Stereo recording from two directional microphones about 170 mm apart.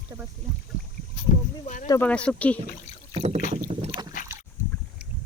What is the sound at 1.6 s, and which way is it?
Speech, 50° left (ahead or behind).